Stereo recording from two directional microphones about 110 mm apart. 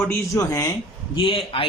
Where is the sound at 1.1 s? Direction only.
50° left (ahead or behind).